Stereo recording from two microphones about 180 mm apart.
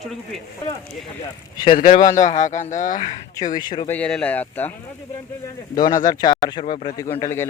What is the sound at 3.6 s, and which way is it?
Speech, 25° left (ahead or behind).